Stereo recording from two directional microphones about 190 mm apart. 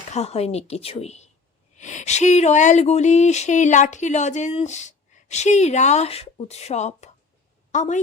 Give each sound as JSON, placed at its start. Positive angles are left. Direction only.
{"t": 0.1, "sound": "a woman's voice", "side_deg": 35}